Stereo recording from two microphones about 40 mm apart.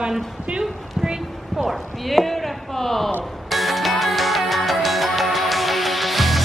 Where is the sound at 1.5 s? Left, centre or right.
Centre.